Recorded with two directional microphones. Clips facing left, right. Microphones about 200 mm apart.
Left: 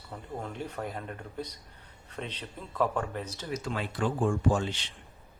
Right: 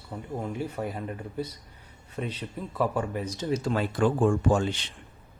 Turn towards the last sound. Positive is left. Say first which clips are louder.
# right 3 dB
turn(degrees=-50)  # may be behind; listen again after turning